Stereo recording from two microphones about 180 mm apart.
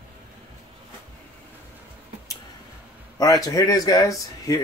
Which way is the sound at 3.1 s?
20° left (ahead or behind).